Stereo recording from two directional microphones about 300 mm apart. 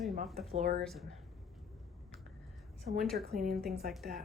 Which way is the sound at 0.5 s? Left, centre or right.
Right.